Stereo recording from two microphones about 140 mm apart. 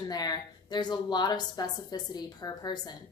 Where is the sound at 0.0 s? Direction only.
30° left (ahead or behind).